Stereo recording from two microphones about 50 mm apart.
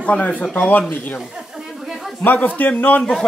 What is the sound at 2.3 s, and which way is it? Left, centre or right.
Speech, left.